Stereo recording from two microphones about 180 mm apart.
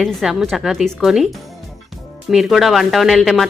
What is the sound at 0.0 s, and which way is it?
Speech, centre (ahead or behind).